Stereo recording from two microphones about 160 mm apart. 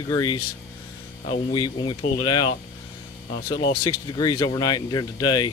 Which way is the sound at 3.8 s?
25° left (ahead or behind).